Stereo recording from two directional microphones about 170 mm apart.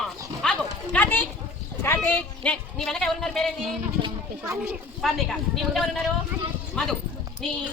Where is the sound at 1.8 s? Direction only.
15° left (ahead or behind).